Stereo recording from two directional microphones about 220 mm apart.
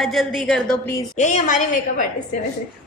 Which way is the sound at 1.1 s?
35° left (ahead or behind).